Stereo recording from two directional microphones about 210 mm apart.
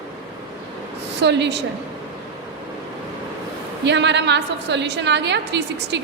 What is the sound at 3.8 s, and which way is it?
A woman's voice, 55° right (ahead or behind).